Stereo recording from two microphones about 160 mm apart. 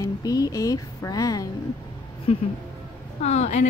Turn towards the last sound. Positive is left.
turn(degrees=50)  # may be behind; listen again after turning